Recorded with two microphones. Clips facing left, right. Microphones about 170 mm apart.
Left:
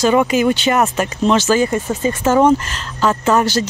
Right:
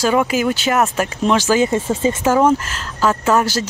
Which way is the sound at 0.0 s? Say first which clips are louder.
Left 3 dB; 5° right (ahead or behind).